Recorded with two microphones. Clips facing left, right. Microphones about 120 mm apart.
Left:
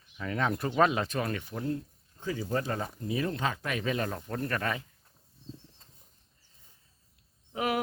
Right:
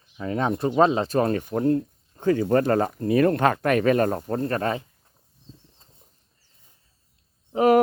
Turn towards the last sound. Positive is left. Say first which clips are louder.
# right 13 dB
turn(degrees=-40)  # may be behind; listen again after turning